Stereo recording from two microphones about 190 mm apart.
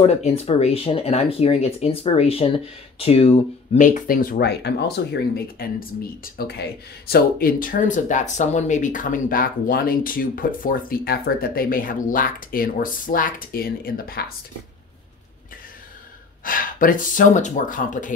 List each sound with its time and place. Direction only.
0.0 s speech: 35° left (ahead or behind); by 14.2 s 50° left (ahead or behind)
16.4 s speech: 45° left (ahead or behind)